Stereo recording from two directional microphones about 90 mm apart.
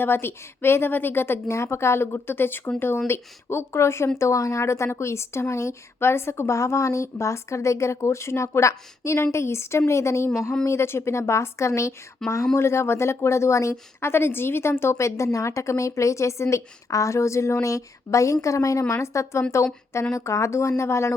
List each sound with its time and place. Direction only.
0.0 s a woman's voice: 25° left (ahead or behind)
12.2 s speech: 5° left (ahead or behind)
12.5 s a woman's voice: 30° left (ahead or behind)